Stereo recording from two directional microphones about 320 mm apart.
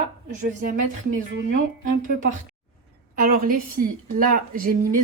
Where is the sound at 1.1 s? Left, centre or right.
Right.